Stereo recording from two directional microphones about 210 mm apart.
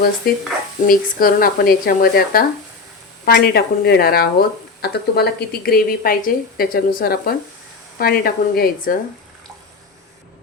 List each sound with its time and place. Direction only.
0.9 s speech: 45° left (ahead or behind)